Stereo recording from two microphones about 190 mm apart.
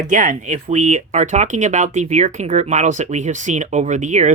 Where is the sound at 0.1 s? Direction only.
45° right (ahead or behind).